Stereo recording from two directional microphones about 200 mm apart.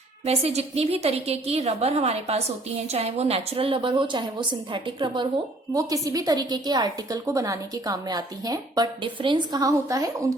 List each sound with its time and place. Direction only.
0.3 s a woman's voice: 30° right (ahead or behind)